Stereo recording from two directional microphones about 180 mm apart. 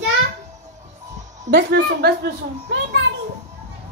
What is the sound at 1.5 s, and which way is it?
A woman's voice, 70° right (ahead or behind).